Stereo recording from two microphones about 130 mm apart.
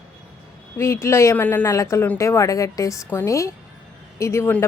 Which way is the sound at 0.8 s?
20° left (ahead or behind).